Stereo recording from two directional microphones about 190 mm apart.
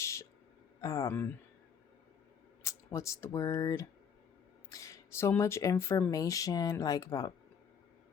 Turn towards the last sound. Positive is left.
turn(degrees=20)  # may be behind; listen again after turning